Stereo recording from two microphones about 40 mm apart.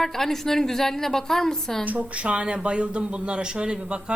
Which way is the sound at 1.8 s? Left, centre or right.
Right.